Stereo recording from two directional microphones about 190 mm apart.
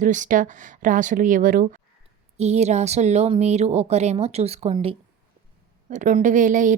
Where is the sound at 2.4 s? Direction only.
35° right (ahead or behind).